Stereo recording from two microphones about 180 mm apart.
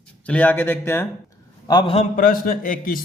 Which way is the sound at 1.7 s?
25° left (ahead or behind).